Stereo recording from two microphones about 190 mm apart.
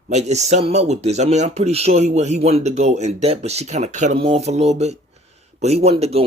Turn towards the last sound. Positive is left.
turn(degrees=-30)  # may be behind; listen again after turning